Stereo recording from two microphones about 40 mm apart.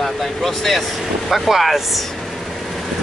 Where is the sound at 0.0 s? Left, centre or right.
Centre.